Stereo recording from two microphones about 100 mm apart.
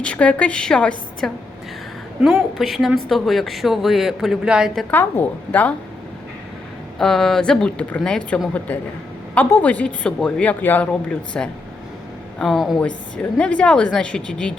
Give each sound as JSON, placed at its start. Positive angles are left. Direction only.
{"t": 0.0, "sound": "speech", "side_deg": 10}
{"t": 2.2, "sound": "speech", "side_deg": 0}
{"t": 4.9, "sound": "speech", "side_deg": 20}
{"t": 7.0, "sound": "speech", "side_deg": 5}
{"t": 13.3, "sound": "speech", "side_deg": 10}